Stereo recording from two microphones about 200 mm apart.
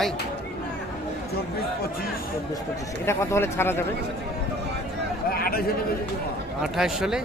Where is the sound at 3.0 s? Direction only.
15° left (ahead or behind).